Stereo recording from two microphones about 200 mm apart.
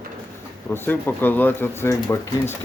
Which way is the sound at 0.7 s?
10° left (ahead or behind).